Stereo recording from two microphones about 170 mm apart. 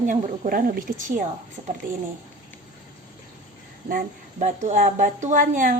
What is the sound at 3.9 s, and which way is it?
A woman's voice, 50° right (ahead or behind).